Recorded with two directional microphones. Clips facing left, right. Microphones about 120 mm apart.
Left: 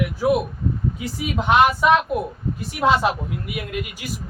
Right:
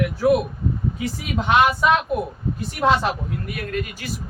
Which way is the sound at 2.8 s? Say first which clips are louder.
Left 1 dB; 5° left (ahead or behind).